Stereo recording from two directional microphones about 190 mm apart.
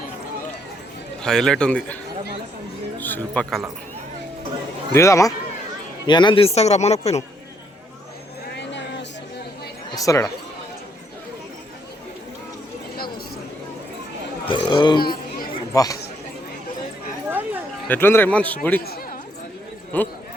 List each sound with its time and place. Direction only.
1.2 s speech: 5° left (ahead or behind)
3.0 s speech: 10° left (ahead or behind)
4.9 s a man's voice: 15° left (ahead or behind); by 7.3 s 35° left (ahead or behind)
8.4 s vehicle: 65° left (ahead or behind)
9.9 s speech: 15° left (ahead or behind)
14.4 s speech: 25° left (ahead or behind)
15.0 s chatter: 50° left (ahead or behind)
15.7 s speech: 20° left (ahead or behind)
17.2 s a sound: 10° right (ahead or behind)
17.8 s a man's voice: 10° left (ahead or behind)
19.9 s a man's voice: 10° left (ahead or behind)